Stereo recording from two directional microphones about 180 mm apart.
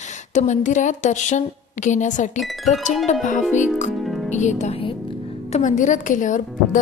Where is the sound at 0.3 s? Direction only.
40° left (ahead or behind).